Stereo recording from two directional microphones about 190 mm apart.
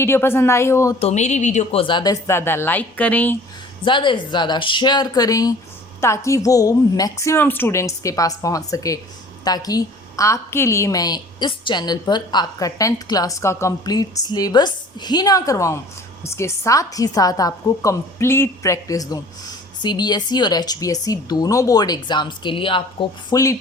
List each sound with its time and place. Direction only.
0.0 s a woman's voice: 10° left (ahead or behind)
0.9 s a woman's voice: 35° left (ahead or behind); by 3.3 s 10° left (ahead or behind)
3.8 s a woman's voice: 25° left (ahead or behind)